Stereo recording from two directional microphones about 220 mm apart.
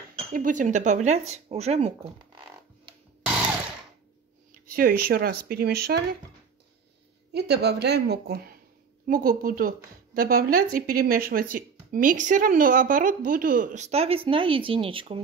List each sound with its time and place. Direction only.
0.3 s a woman's voice: 35° right (ahead or behind)
4.6 s speech: 40° right (ahead or behind)
7.3 s a woman's voice: 50° right (ahead or behind); by 15.2 s 25° right (ahead or behind)